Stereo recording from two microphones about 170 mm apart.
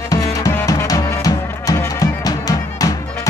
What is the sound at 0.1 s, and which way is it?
Music, 20° left (ahead or behind).